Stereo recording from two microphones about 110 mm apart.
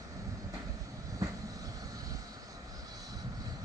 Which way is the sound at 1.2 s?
35° right (ahead or behind).